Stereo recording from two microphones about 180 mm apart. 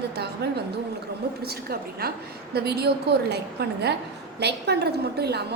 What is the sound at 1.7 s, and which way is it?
A woman's voice, 60° right (ahead or behind).